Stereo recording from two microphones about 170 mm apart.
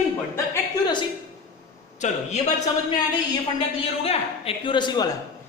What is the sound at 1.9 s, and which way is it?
Speech, 45° left (ahead or behind).